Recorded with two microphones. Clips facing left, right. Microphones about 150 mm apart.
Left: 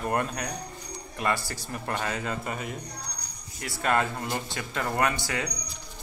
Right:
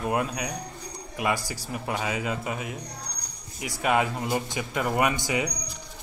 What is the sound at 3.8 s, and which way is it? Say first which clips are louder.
A man's voice: right 2 dB; 10° right (ahead or behind).